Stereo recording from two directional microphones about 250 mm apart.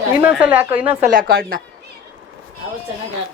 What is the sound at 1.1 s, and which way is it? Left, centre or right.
Speech, right.